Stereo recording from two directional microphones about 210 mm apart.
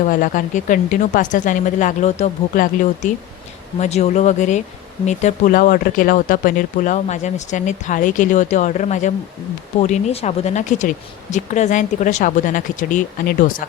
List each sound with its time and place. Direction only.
0.0 s speech: 40° left (ahead or behind)